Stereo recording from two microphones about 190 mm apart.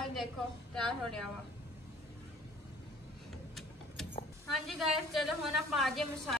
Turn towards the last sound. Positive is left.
turn(degrees=0)  # may be behind; listen again after turning